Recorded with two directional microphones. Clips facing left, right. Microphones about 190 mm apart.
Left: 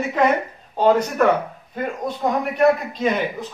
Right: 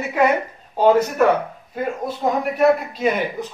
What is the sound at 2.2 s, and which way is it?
Speech, 5° right (ahead or behind).